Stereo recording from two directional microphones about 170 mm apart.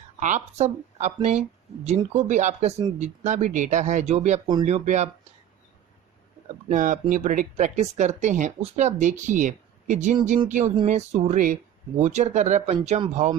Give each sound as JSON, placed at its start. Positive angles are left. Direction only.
{"t": 0.2, "sound": "speech", "side_deg": -45}
{"t": 6.7, "sound": "speech", "side_deg": -50}